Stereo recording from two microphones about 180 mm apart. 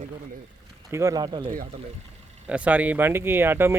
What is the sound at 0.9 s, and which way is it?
Speech, 15° right (ahead or behind).